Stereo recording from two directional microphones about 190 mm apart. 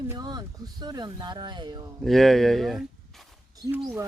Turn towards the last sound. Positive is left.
turn(degrees=-15)  # may be behind; listen again after turning